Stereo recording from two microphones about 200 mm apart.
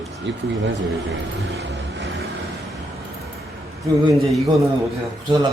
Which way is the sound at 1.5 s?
60° right (ahead or behind).